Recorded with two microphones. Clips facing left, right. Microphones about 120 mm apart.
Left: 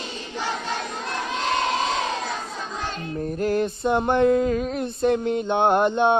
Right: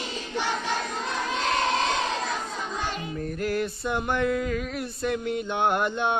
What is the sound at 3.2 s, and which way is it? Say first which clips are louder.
Music: left 6 dB; 25° left (ahead or behind).